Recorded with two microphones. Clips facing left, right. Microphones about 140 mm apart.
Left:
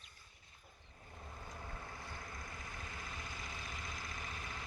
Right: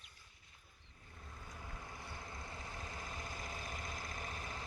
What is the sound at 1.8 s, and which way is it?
Vehicle, 15° right (ahead or behind).